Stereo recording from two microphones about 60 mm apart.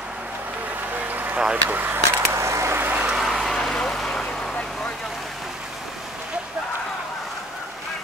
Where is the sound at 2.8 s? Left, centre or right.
Right.